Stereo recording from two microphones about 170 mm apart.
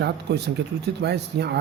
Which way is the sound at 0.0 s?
75° right (ahead or behind).